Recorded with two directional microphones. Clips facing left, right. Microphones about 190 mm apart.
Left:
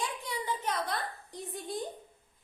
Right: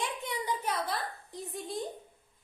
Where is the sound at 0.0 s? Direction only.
20° right (ahead or behind).